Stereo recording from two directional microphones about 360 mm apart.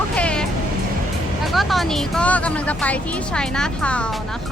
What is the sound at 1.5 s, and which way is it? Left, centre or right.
Speech, centre.